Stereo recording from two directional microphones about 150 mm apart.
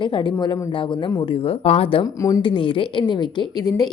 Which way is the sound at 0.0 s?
30° left (ahead or behind).